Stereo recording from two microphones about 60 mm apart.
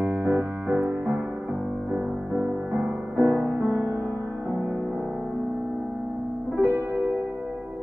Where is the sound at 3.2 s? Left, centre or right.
Right.